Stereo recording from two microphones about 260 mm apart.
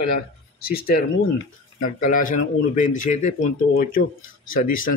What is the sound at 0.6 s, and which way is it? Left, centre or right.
Speech, left.